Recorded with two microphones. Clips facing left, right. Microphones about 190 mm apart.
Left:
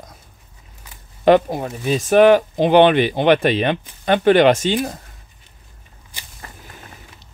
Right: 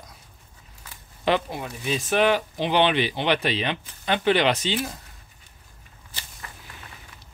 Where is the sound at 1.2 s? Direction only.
45° left (ahead or behind).